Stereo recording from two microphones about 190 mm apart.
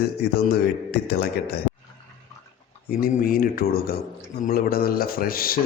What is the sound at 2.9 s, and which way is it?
Speech, 50° left (ahead or behind).